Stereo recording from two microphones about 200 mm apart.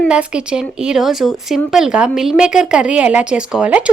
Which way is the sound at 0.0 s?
5° right (ahead or behind).